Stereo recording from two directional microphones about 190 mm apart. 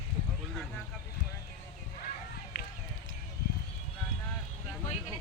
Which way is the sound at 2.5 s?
70° left (ahead or behind).